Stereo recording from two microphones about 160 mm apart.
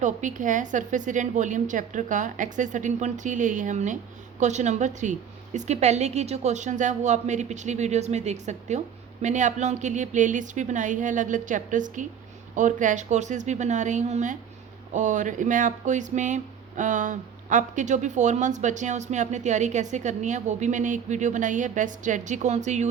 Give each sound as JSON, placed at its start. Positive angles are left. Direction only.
{"t": 0.0, "sound": "speech", "side_deg": -50}